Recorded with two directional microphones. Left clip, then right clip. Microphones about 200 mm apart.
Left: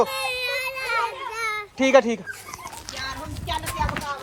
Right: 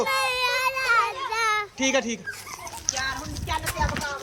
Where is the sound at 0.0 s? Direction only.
5° right (ahead or behind).